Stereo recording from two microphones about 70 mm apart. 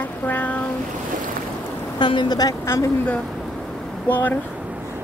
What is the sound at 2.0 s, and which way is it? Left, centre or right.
Speech, left.